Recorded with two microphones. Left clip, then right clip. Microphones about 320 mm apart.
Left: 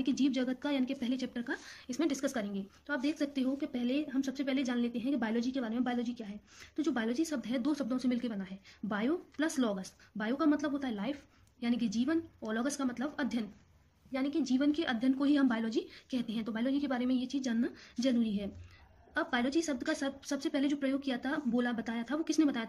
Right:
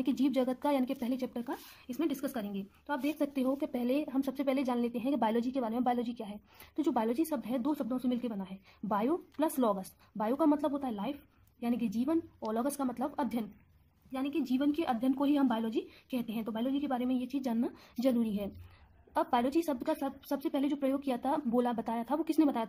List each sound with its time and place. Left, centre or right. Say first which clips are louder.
0.0 s speech: right 2 dB; centre